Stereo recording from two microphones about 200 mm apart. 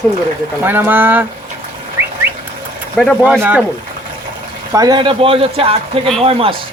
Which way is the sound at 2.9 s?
5° left (ahead or behind).